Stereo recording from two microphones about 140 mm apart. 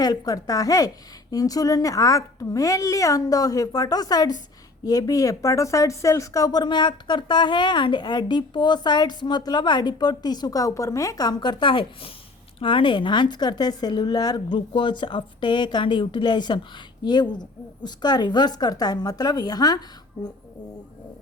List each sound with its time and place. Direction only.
0.0 s a woman's voice: 25° left (ahead or behind)